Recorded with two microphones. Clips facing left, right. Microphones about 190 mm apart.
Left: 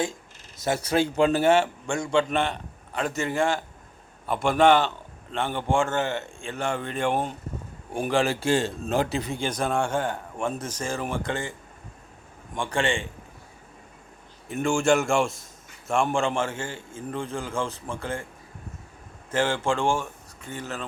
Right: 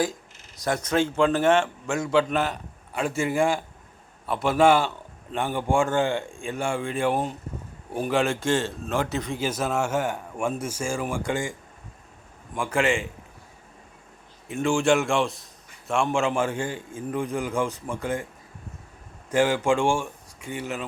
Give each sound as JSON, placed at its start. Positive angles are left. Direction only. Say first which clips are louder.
{"t": 0.8, "sound": "a man's voice", "louder": "even", "side_deg": 10}
{"t": 8.5, "sound": "a man's voice", "louder": "left 1 dB", "side_deg": 35}
{"t": 9.4, "sound": "a man's voice", "louder": "even", "side_deg": -5}
{"t": 12.7, "sound": "a man's voice", "louder": "right 3 dB", "side_deg": 30}
{"t": 14.4, "sound": "a man's voice", "louder": "right 1 dB", "side_deg": 0}
{"t": 19.3, "sound": "speech", "louder": "right 3 dB", "side_deg": -10}